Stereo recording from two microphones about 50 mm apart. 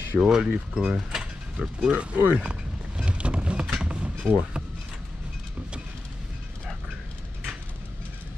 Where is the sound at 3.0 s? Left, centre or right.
Right.